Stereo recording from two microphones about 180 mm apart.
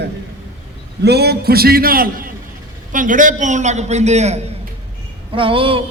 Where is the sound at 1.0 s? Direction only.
65° right (ahead or behind); by 5.8 s 30° right (ahead or behind).